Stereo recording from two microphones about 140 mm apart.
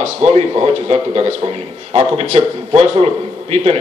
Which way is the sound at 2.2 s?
50° right (ahead or behind).